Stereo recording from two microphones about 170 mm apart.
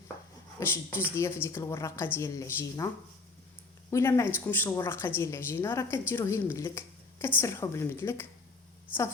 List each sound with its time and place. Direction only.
0.6 s a woman's voice: 15° left (ahead or behind)
3.9 s a woman's voice: 15° left (ahead or behind)